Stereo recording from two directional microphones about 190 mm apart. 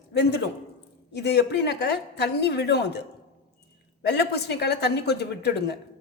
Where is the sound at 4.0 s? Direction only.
60° left (ahead or behind).